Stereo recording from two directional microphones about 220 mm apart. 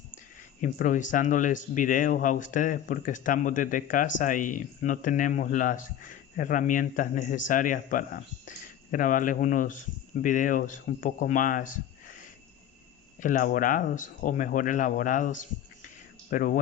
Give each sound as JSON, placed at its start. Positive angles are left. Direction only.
{"t": 0.6, "sound": "speech", "side_deg": 35}
{"t": 13.2, "sound": "speech", "side_deg": 35}